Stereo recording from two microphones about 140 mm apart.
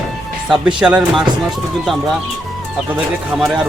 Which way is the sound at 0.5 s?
5° right (ahead or behind).